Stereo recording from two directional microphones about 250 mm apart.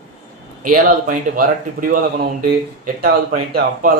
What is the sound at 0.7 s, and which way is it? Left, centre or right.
Speech, right.